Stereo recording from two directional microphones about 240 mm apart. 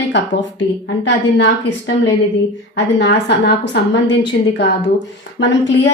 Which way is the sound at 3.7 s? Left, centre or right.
Left.